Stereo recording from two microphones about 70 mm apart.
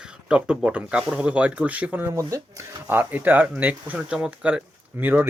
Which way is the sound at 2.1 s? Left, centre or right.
Right.